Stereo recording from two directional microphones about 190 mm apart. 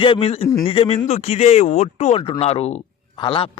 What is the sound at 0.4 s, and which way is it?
Speech, 15° left (ahead or behind).